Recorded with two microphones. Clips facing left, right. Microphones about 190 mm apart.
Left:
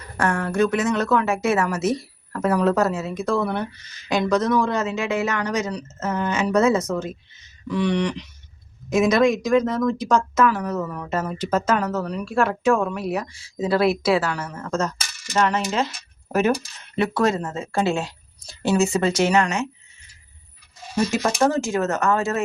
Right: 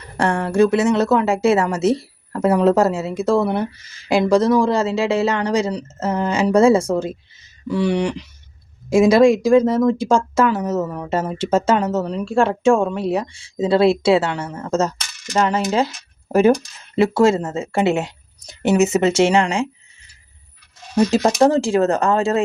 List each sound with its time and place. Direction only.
0.2 s speech: 30° right (ahead or behind)
20.9 s speech: 35° right (ahead or behind)